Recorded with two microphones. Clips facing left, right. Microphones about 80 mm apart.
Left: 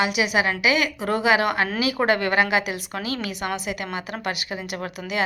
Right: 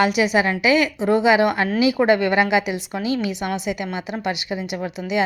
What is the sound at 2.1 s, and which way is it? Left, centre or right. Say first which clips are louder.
Speech: right 3 dB; left.